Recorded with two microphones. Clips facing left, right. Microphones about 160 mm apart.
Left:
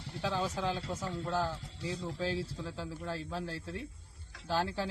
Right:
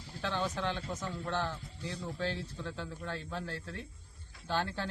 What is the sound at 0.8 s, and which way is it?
Speech, 35° left (ahead or behind).